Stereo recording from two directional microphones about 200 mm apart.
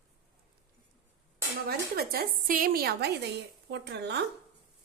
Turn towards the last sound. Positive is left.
turn(degrees=-55)  # may be behind; listen again after turning